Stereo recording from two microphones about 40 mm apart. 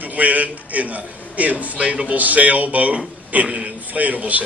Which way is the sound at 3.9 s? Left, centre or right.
Right.